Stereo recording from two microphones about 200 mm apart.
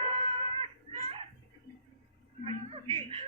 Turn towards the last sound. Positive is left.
turn(degrees=-30)  # may be behind; listen again after turning